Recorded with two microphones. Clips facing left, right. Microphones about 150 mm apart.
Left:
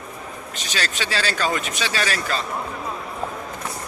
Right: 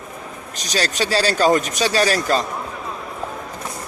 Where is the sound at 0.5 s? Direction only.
40° right (ahead or behind).